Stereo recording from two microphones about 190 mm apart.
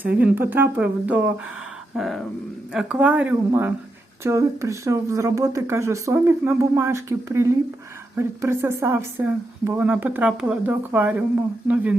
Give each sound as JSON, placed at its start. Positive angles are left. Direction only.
{"t": 0.2, "sound": "speech", "side_deg": -10}